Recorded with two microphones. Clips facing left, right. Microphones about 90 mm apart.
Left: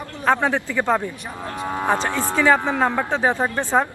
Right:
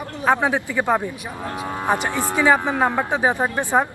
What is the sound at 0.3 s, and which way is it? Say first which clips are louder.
A woman's voice: even; 15° right (ahead or behind).